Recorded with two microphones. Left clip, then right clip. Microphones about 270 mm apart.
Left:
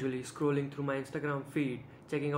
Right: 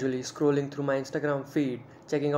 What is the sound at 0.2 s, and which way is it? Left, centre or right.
Speech, centre.